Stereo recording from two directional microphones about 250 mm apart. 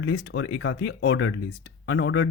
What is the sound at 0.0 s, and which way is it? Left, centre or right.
Speech, left.